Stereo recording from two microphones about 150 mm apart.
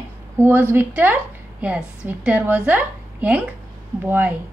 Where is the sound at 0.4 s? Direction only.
15° right (ahead or behind).